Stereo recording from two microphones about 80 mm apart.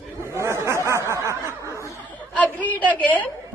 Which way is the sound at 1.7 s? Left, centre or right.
Left.